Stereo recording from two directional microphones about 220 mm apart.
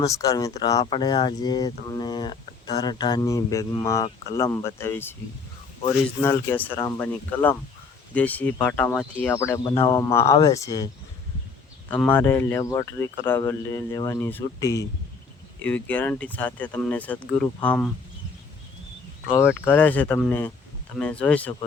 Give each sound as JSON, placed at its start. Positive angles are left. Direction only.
{"t": 0.0, "sound": "speech", "side_deg": 15}
{"t": 6.2, "sound": "speech", "side_deg": 10}
{"t": 19.3, "sound": "speech", "side_deg": 10}